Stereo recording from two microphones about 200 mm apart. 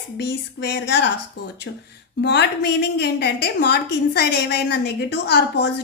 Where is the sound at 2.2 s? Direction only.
60° left (ahead or behind).